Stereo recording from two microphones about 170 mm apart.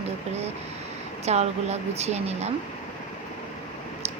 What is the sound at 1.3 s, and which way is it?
Speech, 40° right (ahead or behind).